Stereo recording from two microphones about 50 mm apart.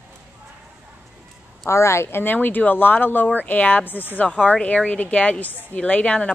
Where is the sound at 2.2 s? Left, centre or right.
Left.